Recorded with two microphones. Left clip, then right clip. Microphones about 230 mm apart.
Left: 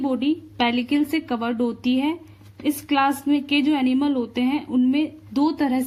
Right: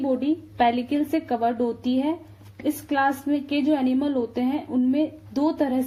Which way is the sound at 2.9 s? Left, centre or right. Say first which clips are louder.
Left 3 dB; left.